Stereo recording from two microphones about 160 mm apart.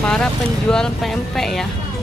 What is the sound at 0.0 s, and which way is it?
Speech, 5° left (ahead or behind).